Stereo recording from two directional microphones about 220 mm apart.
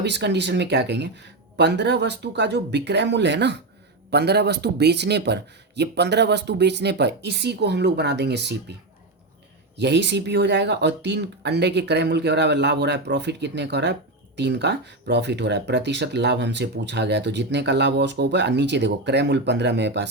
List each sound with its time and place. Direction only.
0.0 s speech: 50° right (ahead or behind)
9.7 s speech: 50° right (ahead or behind)